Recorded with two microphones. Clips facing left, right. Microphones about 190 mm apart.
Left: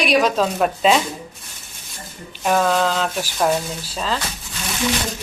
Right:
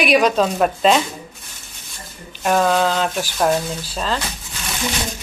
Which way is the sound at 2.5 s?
5° right (ahead or behind).